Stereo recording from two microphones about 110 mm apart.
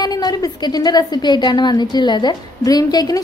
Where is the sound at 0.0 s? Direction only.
35° left (ahead or behind).